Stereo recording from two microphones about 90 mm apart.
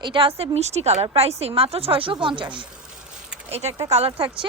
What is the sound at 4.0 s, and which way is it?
Speech, 90° right.